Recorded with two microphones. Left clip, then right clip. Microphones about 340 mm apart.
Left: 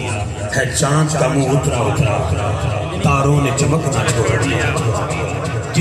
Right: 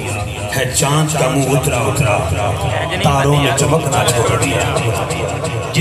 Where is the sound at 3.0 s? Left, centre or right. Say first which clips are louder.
Right 2 dB; right.